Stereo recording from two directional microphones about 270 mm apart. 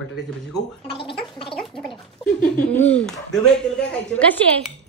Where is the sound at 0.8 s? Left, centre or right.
Centre.